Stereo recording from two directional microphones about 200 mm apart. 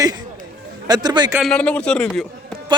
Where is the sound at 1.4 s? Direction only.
Centre (ahead or behind).